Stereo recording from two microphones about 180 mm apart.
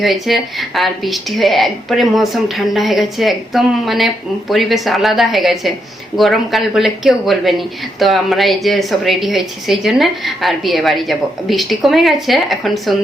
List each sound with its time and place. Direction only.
0.0 s speech: centre (ahead or behind)